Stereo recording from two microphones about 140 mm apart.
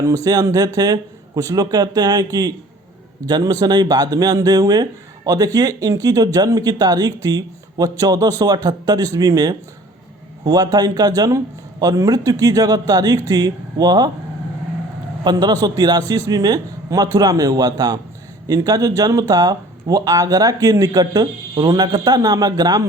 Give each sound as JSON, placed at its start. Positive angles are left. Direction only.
{"t": 0.0, "sound": "speech", "side_deg": -25}
{"t": 15.2, "sound": "a man's voice", "side_deg": -30}